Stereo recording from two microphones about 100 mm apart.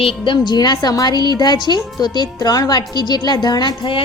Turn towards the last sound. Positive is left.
turn(degrees=55)  # may be behind; listen again after turning